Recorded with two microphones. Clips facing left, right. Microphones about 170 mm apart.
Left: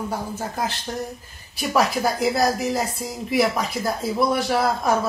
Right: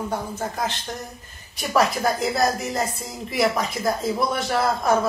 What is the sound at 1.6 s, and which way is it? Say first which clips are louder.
Speech: even; centre (ahead or behind).